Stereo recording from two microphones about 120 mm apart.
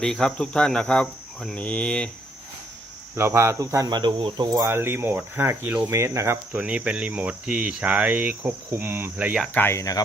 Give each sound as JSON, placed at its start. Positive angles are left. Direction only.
{"t": 0.0, "sound": "speech", "side_deg": 5}
{"t": 3.2, "sound": "speech", "side_deg": -20}
{"t": 4.7, "sound": "speech", "side_deg": -20}
{"t": 6.6, "sound": "speech", "side_deg": -10}
{"t": 9.6, "sound": "speech", "side_deg": 20}